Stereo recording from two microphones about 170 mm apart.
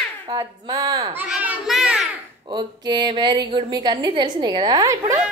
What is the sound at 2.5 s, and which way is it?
A woman's voice, 25° right (ahead or behind).